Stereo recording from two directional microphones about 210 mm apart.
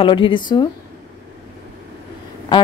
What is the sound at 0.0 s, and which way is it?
Speech, 25° left (ahead or behind).